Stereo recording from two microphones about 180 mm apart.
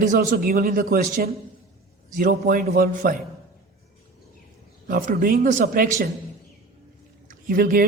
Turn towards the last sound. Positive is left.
turn(degrees=-50)  # may be behind; listen again after turning